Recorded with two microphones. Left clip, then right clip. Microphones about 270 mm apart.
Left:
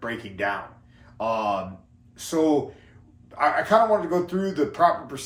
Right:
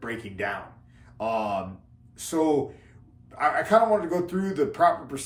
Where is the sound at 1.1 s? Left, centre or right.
Centre.